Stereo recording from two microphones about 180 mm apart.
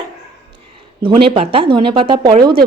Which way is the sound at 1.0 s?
30° right (ahead or behind).